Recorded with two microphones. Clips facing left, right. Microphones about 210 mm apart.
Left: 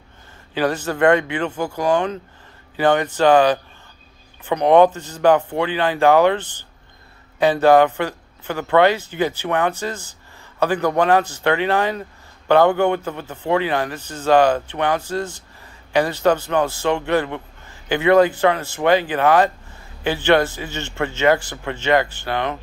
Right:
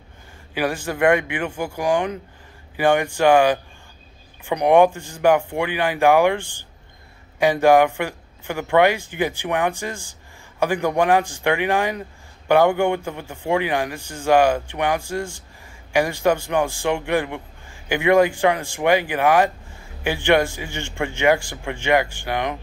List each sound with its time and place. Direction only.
0.6 s a man's voice: 10° right (ahead or behind)